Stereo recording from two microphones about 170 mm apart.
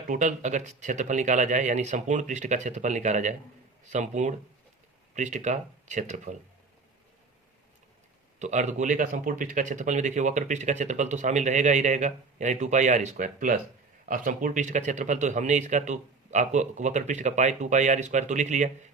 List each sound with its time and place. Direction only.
0.1 s speech: 50° right (ahead or behind)
8.4 s speech: 45° right (ahead or behind)